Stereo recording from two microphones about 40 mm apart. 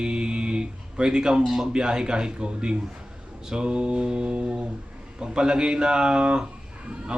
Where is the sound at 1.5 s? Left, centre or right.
Centre.